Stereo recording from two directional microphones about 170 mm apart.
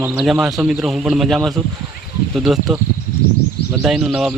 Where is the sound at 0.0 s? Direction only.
5° right (ahead or behind).